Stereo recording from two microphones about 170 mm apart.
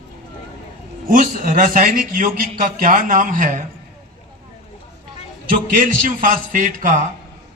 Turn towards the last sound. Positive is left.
turn(degrees=-50)  # may be behind; listen again after turning